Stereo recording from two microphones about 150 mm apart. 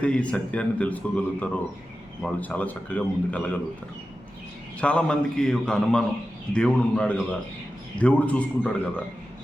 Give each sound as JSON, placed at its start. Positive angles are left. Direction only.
{"t": 0.0, "sound": "a man's voice", "side_deg": 5}
{"t": 4.8, "sound": "a man's voice", "side_deg": 10}